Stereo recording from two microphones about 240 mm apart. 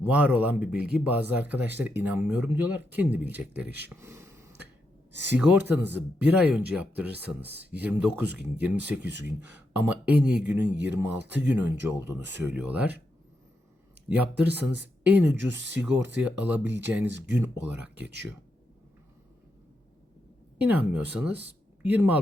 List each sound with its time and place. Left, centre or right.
0.0 s speech: centre
5.1 s speech: right
5.4 s speech: centre
14.2 s speech: centre
20.6 s speech: centre